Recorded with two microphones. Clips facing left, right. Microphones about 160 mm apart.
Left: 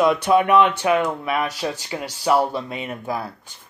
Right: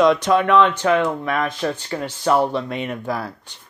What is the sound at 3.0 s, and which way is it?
Speech, 25° left (ahead or behind).